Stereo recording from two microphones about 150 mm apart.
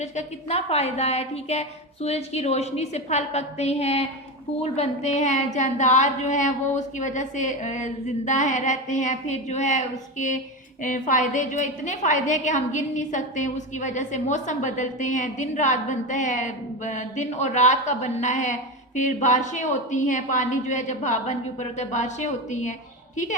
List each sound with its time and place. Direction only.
0.0 s a woman's voice: 45° left (ahead or behind)